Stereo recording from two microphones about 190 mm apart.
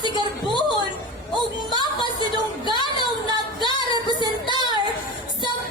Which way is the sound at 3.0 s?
25° left (ahead or behind).